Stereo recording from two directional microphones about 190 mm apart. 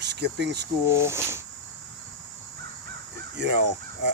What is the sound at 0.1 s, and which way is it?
Speech, 65° right (ahead or behind).